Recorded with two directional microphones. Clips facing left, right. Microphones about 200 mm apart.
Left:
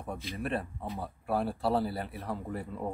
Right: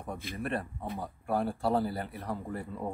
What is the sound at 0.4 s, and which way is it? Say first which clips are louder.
A man's voice: even; centre (ahead or behind).